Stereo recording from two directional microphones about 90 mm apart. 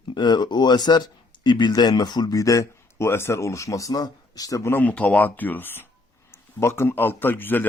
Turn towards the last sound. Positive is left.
turn(degrees=25)  # may be behind; listen again after turning